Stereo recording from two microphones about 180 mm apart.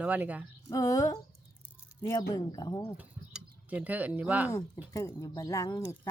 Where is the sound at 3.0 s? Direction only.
10° right (ahead or behind).